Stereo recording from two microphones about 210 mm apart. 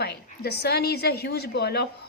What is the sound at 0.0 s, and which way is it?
A woman's voice, 50° left (ahead or behind).